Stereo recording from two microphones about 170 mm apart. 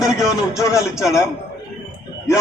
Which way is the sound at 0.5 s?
20° left (ahead or behind).